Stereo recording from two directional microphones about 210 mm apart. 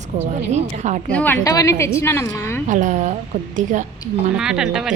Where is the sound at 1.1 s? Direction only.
10° left (ahead or behind).